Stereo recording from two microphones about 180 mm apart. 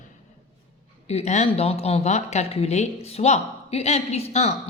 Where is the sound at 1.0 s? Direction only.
35° left (ahead or behind).